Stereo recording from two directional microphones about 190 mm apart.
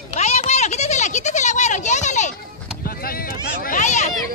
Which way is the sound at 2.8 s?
50° left (ahead or behind).